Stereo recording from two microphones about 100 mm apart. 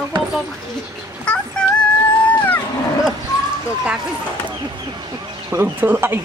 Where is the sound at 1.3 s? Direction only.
10° left (ahead or behind).